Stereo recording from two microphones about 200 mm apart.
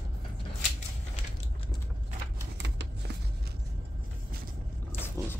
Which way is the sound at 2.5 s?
60° right (ahead or behind).